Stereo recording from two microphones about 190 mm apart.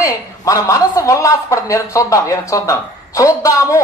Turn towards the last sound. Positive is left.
turn(degrees=15)  # may be behind; listen again after turning